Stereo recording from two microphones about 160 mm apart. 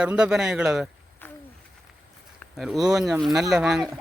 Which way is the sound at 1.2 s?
10° left (ahead or behind).